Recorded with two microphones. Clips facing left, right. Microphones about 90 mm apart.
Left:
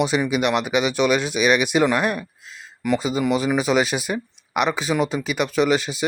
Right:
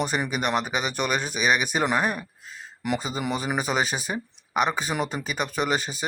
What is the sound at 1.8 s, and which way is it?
Speech, 25° right (ahead or behind).